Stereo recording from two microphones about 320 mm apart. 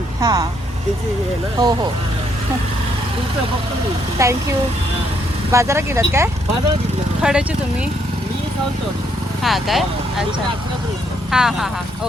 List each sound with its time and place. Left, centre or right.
0.2 s speech: centre
1.5 s speech: centre
4.2 s speech: centre
5.5 s speech: centre
9.4 s speech: centre
11.3 s speech: centre